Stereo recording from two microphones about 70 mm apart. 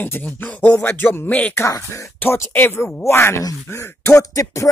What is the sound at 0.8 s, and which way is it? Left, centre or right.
Speech, left.